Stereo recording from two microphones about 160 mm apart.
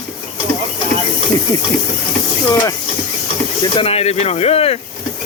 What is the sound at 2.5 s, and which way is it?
Speech, 20° left (ahead or behind).